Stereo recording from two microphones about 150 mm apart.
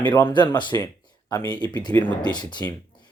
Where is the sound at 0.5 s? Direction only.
30° left (ahead or behind).